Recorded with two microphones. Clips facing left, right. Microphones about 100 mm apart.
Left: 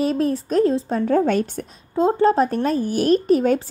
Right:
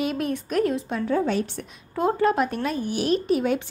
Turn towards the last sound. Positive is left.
turn(degrees=40)  # may be behind; listen again after turning